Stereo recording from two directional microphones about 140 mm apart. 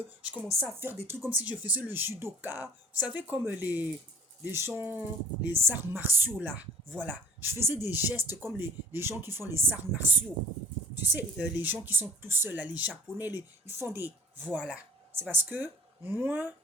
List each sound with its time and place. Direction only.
0.2 s speech: 10° right (ahead or behind)